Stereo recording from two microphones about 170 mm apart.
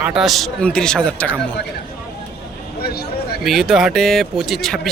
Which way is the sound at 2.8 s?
65° left (ahead or behind).